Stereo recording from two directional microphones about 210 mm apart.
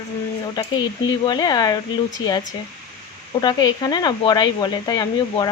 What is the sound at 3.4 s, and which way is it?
Speech, 20° left (ahead or behind).